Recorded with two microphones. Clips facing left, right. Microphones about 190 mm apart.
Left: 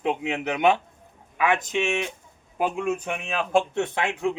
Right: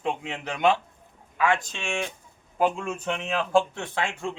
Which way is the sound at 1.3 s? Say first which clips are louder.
Left 2 dB; 20° left (ahead or behind).